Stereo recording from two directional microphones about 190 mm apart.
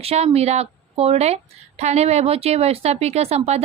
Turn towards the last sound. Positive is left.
turn(degrees=-35)  # may be behind; listen again after turning